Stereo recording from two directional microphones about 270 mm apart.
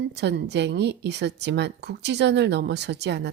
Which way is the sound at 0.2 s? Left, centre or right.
Right.